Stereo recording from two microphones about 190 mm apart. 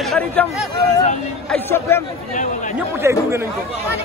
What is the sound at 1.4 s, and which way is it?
Speech, 10° left (ahead or behind).